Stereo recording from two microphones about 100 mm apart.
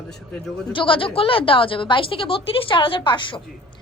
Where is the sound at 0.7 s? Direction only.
60° left (ahead or behind).